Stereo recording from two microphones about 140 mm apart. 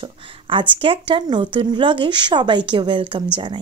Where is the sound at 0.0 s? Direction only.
40° right (ahead or behind).